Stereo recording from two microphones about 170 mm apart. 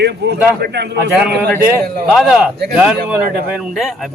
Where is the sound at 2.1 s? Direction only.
Centre (ahead or behind).